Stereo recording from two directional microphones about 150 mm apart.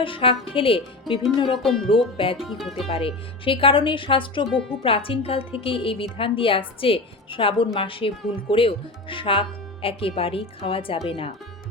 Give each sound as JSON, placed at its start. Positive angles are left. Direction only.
{"t": 0.0, "sound": "a woman's voice", "side_deg": 35}
{"t": 1.5, "sound": "speech", "side_deg": 0}
{"t": 2.1, "sound": "a woman's voice", "side_deg": 35}
{"t": 2.4, "sound": "speech", "side_deg": 0}
{"t": 2.8, "sound": "a woman's voice", "side_deg": 40}